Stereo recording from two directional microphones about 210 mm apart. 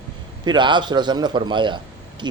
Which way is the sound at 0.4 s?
20° right (ahead or behind).